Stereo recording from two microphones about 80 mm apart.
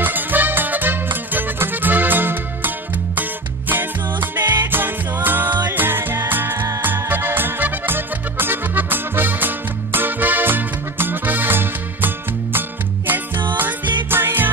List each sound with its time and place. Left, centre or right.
0.0 s music: right